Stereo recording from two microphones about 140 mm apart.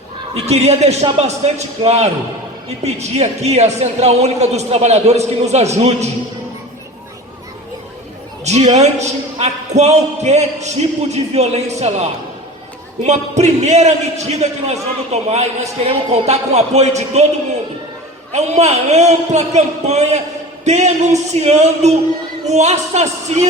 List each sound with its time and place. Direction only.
0.4 s a man's voice: 50° right (ahead or behind)
8.4 s a man's voice: 50° right (ahead or behind)
18.3 s a man's voice: 55° right (ahead or behind)